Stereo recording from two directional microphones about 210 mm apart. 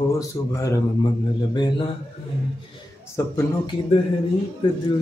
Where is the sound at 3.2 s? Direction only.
10° left (ahead or behind).